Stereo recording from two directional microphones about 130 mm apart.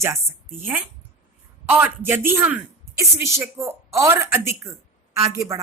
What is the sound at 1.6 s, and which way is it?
A man's voice, 15° right (ahead or behind).